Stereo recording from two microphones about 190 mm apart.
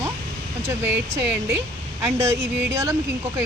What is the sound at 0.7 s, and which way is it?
Speech, 15° right (ahead or behind).